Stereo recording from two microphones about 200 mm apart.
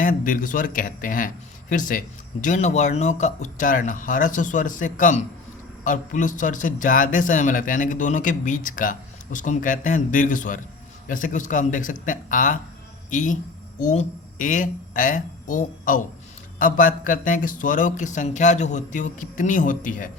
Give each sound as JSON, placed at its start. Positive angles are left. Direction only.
{"t": 0.0, "sound": "a man's voice", "side_deg": 40}